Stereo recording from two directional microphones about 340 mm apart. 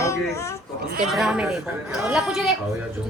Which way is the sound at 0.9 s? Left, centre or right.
Right.